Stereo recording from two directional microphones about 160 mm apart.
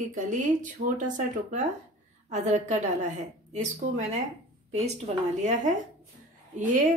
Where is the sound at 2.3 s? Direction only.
45° right (ahead or behind).